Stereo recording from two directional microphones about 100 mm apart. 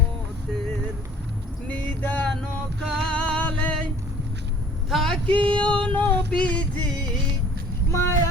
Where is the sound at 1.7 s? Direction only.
15° left (ahead or behind).